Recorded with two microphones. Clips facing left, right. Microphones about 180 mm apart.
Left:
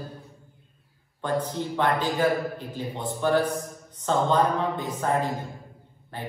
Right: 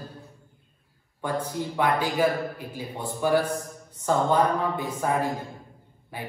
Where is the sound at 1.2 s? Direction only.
10° right (ahead or behind).